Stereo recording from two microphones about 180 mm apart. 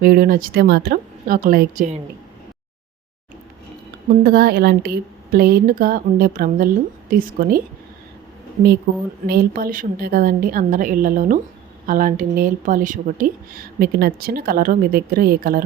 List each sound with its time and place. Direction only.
0.0 s speech: 55° right (ahead or behind)
4.2 s speech: 60° right (ahead or behind)
8.9 s speech: 60° right (ahead or behind)